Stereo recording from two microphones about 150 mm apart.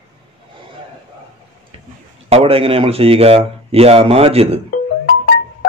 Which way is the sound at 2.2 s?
40° right (ahead or behind).